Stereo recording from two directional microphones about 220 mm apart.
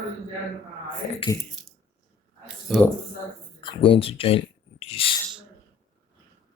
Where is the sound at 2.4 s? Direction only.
Centre (ahead or behind).